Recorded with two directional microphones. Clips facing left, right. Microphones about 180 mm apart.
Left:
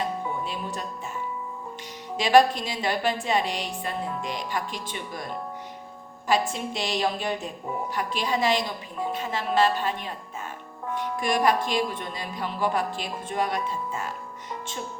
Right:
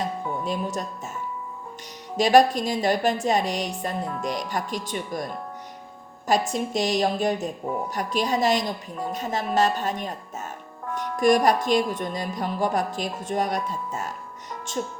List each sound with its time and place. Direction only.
0.4 s a woman's voice: 45° right (ahead or behind)
2.1 s a woman's voice: 40° right (ahead or behind)
6.2 s a woman's voice: 45° right (ahead or behind)